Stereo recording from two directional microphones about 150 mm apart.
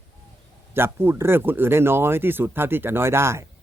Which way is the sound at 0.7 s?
15° right (ahead or behind).